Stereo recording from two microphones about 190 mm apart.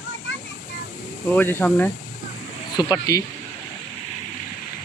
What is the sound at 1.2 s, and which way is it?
Speech, 10° left (ahead or behind).